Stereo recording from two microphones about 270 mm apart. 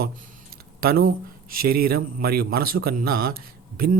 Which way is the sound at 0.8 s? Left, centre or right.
Right.